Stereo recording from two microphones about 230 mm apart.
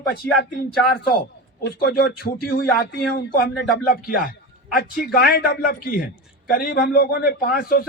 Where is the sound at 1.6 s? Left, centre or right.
Left.